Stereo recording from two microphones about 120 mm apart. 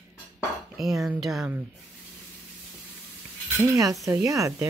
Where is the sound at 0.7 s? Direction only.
Centre (ahead or behind).